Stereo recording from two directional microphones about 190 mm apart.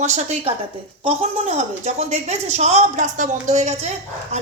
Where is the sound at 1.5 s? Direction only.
35° right (ahead or behind).